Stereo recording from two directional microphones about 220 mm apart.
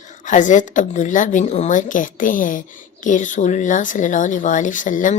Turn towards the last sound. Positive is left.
turn(degrees=35)  # may be behind; listen again after turning